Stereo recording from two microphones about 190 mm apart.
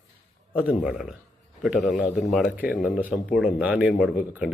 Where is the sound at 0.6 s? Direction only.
5° right (ahead or behind).